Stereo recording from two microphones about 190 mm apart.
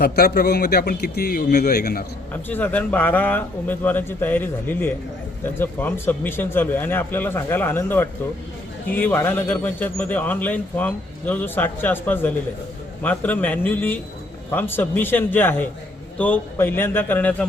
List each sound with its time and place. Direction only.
0.0 s a man's voice: 55° left (ahead or behind)
2.3 s a man's voice: 10° left (ahead or behind)